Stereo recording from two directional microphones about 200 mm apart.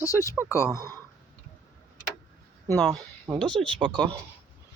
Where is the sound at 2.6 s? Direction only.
10° left (ahead or behind).